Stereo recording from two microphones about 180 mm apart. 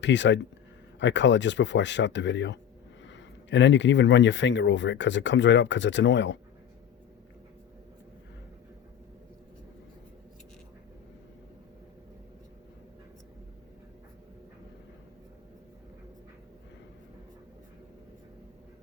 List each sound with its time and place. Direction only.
0.0 s speech: 85° left